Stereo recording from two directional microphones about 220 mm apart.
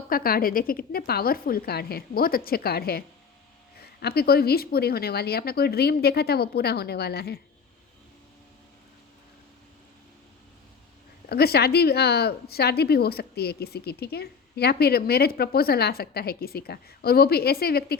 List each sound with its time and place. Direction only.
0.1 s a woman's voice: 40° left (ahead or behind)
11.3 s a woman's voice: 45° left (ahead or behind)